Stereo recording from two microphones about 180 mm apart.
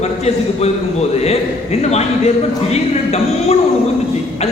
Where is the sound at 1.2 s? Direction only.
35° left (ahead or behind).